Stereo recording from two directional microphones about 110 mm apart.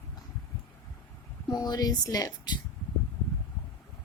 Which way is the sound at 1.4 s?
35° left (ahead or behind).